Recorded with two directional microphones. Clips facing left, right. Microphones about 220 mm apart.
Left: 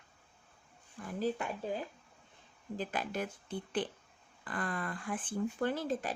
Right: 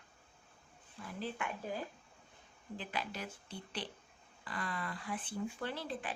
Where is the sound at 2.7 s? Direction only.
45° left (ahead or behind).